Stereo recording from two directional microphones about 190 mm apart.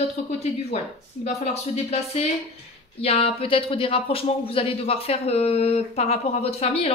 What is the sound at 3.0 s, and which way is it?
Speech, 30° left (ahead or behind).